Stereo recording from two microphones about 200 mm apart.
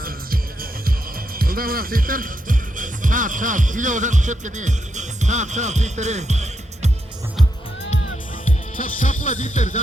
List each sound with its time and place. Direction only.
0.0 s music: 45° right (ahead or behind)
1.4 s speech: 45° right (ahead or behind)
8.4 s music: 45° left (ahead or behind)
9.2 s speech: 40° left (ahead or behind)